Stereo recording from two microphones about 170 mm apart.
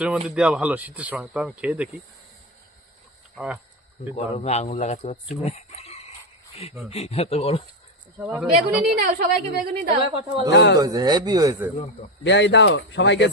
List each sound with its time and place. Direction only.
0.3 s speech: 5° right (ahead or behind)
3.3 s speech: 5° right (ahead or behind)
4.1 s speech: 40° left (ahead or behind)
5.4 s chicken: 40° left (ahead or behind)
6.9 s speech: 35° left (ahead or behind)
8.2 s a woman's voice: 5° right (ahead or behind)
9.0 s a woman's voice: 60° right (ahead or behind)
9.9 s a woman's voice: 30° right (ahead or behind)
10.5 s speech: 90° left
10.8 s speech: 25° right (ahead or behind)
12.2 s speech: 90° left